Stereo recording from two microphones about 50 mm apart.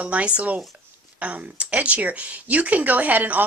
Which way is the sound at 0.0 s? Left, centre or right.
Right.